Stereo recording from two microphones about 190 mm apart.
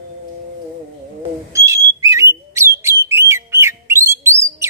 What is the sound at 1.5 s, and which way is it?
Bird, 15° right (ahead or behind).